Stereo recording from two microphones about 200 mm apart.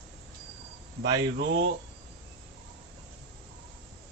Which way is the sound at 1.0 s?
55° right (ahead or behind).